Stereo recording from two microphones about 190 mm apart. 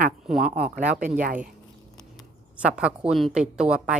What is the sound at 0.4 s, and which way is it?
Speech, 50° right (ahead or behind).